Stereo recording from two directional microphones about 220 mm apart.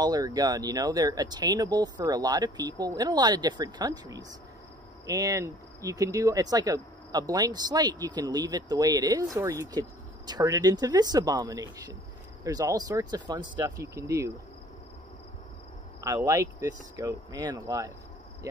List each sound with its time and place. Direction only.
0.0 s speech: 15° right (ahead or behind)
16.0 s speech: 15° right (ahead or behind)